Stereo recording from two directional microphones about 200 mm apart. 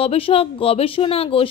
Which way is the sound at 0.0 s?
30° left (ahead or behind).